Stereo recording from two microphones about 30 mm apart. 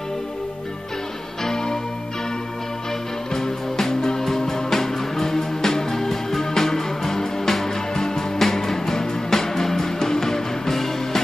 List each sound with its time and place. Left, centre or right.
1.4 s music: left
3.3 s music: centre